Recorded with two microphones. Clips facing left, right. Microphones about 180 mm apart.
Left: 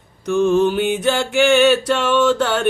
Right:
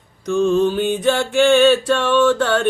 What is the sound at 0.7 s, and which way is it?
Music, 10° left (ahead or behind).